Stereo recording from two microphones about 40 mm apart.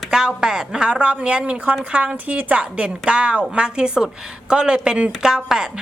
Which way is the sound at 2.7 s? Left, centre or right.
Right.